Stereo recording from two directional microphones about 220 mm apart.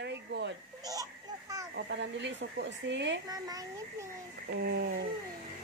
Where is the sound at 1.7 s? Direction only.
50° right (ahead or behind).